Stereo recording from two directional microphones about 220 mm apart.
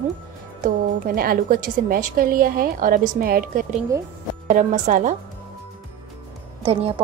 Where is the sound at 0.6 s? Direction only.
40° right (ahead or behind).